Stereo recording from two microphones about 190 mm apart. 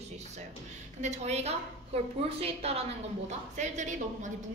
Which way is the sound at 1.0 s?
35° right (ahead or behind).